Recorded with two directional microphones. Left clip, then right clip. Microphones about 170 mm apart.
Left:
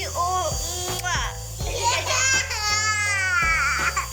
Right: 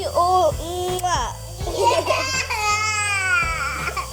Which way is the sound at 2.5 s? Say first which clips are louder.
Right 2 dB; 15° right (ahead or behind).